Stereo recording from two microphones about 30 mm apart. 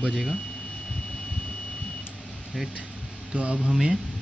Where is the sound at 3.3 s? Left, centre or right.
Right.